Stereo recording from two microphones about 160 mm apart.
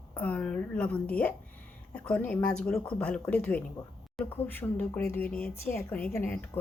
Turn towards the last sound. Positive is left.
turn(degrees=10)  # may be behind; listen again after turning